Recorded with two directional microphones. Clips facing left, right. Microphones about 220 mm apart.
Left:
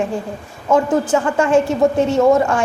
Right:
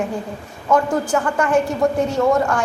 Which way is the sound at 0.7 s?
25° left (ahead or behind).